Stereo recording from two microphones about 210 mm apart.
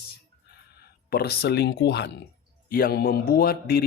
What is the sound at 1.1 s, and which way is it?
A man's voice, 50° left (ahead or behind).